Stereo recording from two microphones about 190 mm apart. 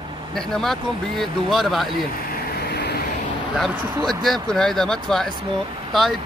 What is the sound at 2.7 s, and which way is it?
Vehicle, 60° left (ahead or behind).